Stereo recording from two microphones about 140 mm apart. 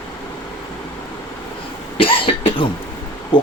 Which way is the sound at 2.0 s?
40° left (ahead or behind).